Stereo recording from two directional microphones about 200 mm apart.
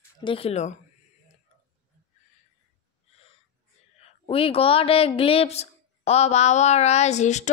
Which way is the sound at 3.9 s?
30° left (ahead or behind).